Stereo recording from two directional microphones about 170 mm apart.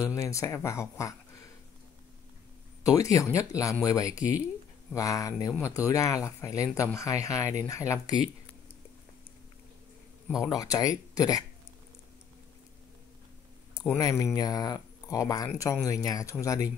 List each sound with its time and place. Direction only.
0.0 s speech: 20° left (ahead or behind)
2.8 s speech: 20° left (ahead or behind)
10.4 s speech: 20° left (ahead or behind)
13.9 s speech: 20° left (ahead or behind)